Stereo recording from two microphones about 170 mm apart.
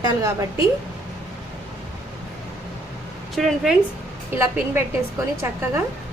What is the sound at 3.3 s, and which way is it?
Speech, centre (ahead or behind).